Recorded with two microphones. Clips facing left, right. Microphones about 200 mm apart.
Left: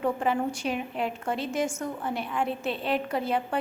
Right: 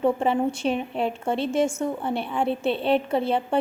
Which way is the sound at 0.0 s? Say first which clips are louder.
Right 5 dB; 25° right (ahead or behind).